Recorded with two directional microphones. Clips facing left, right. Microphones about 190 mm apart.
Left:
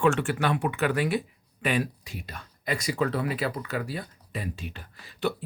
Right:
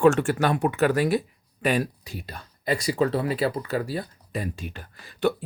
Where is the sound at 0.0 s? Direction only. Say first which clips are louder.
Right 5 dB; 40° right (ahead or behind).